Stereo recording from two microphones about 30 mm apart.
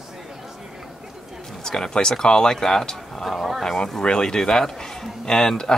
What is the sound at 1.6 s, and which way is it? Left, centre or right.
Speech, left.